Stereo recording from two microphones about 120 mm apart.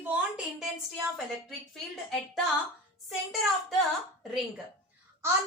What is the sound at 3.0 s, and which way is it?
Speech, centre (ahead or behind).